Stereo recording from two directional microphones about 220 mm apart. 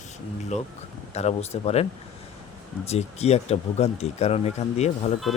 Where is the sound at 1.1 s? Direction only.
30° left (ahead or behind).